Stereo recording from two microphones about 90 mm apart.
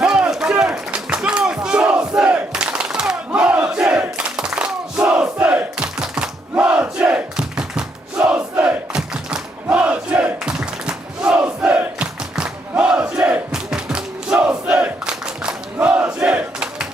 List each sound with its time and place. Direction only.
0.0 s music: 10° right (ahead or behind)
7.0 s a sound: 10° right (ahead or behind)
8.2 s crowd: 20° right (ahead or behind)
8.9 s battle cry: 10° right (ahead or behind)